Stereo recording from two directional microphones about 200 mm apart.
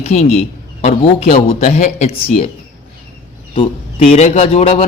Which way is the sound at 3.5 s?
25° left (ahead or behind).